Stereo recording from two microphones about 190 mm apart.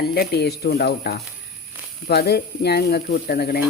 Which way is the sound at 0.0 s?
55° left (ahead or behind).